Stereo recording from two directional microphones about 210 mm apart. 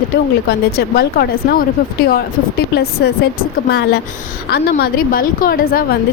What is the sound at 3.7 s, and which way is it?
Speech, 50° left (ahead or behind).